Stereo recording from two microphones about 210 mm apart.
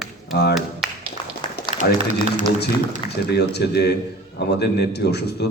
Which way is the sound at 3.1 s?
50° left (ahead or behind).